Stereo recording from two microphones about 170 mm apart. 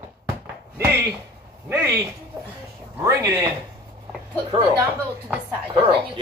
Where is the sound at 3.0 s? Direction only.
20° right (ahead or behind).